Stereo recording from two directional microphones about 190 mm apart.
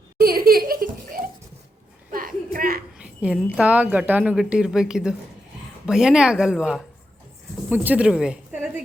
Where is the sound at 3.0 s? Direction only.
5° right (ahead or behind).